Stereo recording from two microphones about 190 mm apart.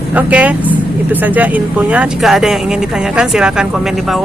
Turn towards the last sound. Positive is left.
turn(degrees=-5)  # may be behind; listen again after turning